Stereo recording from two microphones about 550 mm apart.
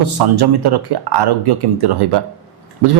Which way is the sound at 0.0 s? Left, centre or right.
Right.